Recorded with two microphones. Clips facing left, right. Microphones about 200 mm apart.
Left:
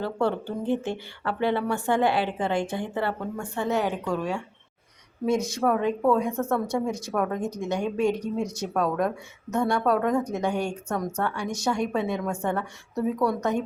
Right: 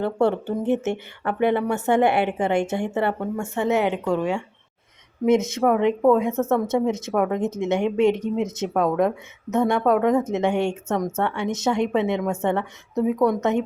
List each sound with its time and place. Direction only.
0.0 s a woman's voice: 25° right (ahead or behind)